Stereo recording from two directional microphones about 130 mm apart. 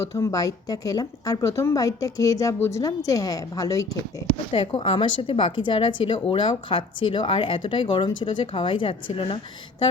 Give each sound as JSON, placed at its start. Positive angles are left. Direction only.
{"t": 0.0, "sound": "a woman's voice", "side_deg": 25}
{"t": 4.3, "sound": "a woman's voice", "side_deg": 45}